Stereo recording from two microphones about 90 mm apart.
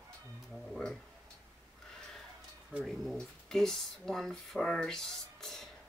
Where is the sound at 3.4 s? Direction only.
5° left (ahead or behind).